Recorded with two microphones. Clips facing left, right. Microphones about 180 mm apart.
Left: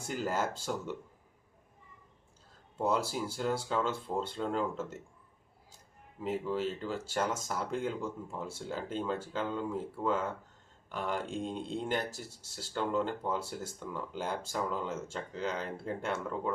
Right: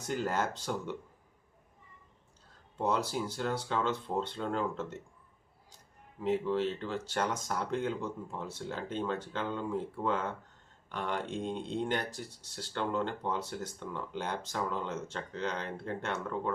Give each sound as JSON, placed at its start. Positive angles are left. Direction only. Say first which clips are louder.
{"t": 0.0, "sound": "speech", "louder": "right 1 dB", "side_deg": 10}
{"t": 2.7, "sound": "speech", "louder": "even", "side_deg": 10}
{"t": 6.1, "sound": "speech", "louder": "right 3 dB", "side_deg": 5}